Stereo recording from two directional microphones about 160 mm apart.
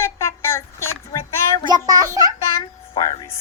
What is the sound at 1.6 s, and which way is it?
Speech, 25° right (ahead or behind).